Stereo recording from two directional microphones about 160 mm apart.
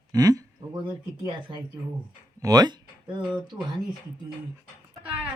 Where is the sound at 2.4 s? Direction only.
25° right (ahead or behind).